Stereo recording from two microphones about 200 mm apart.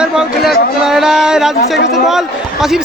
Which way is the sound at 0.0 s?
5° right (ahead or behind).